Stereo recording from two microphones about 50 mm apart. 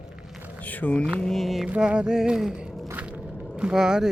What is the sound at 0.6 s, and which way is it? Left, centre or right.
Speech, left.